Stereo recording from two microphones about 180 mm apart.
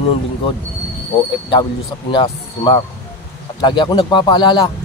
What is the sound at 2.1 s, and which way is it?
Speech, 25° left (ahead or behind).